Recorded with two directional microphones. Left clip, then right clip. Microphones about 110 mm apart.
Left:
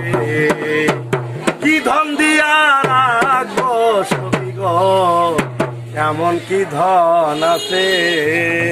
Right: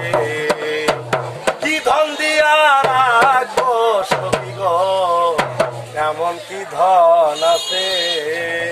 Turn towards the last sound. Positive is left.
turn(degrees=-20)  # may be behind; listen again after turning